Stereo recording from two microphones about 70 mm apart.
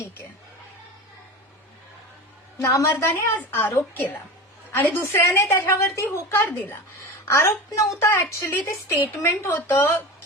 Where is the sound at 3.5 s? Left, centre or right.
Left.